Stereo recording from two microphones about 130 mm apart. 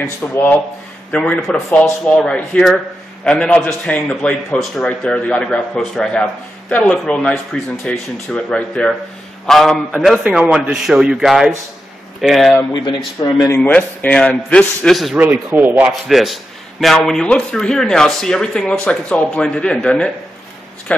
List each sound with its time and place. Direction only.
0.2 s a man's voice: 10° left (ahead or behind)
12.7 s speech: 35° left (ahead or behind)
13.6 s a man's voice: 10° left (ahead or behind)
15.1 s speech: 10° right (ahead or behind)
15.9 s speech: centre (ahead or behind)